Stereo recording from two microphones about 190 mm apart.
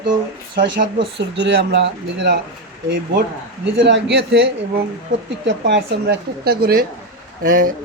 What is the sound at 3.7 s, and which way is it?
Speech, 65° right (ahead or behind).